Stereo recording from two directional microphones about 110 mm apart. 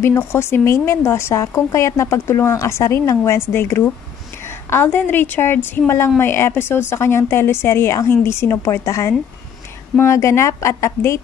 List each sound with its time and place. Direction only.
0.0 s speech: 20° left (ahead or behind)